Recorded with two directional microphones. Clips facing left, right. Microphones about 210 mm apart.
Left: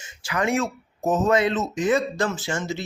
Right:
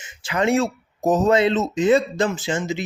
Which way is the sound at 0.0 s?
25° right (ahead or behind).